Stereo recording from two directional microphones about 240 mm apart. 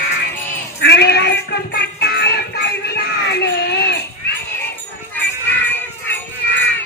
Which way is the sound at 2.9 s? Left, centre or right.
Left.